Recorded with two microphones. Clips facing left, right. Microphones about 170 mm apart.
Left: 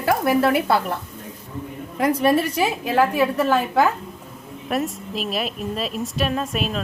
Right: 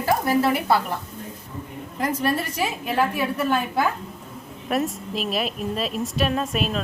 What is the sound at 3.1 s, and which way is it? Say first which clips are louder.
Speech: left 4 dB; 90° left.